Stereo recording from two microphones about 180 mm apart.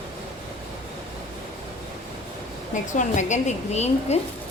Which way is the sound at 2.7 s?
45° left (ahead or behind).